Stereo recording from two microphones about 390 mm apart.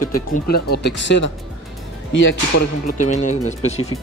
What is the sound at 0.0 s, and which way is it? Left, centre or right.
Speech, left.